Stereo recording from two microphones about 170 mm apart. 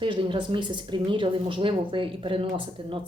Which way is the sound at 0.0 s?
30° right (ahead or behind).